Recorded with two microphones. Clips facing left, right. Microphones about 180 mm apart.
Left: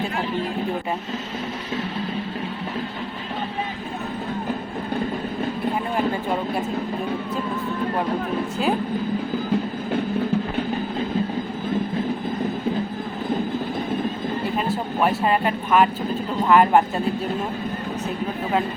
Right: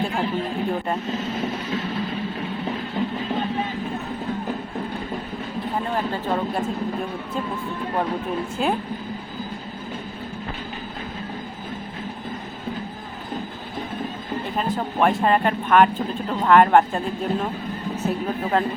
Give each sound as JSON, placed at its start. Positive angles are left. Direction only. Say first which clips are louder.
{"t": 14.7, "sound": "speech", "louder": "right 3 dB", "side_deg": 5}